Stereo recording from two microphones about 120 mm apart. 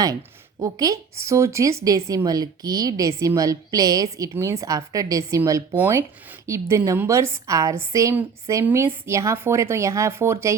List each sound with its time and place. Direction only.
0.6 s a woman's voice: 30° right (ahead or behind)
5.7 s a woman's voice: 15° right (ahead or behind)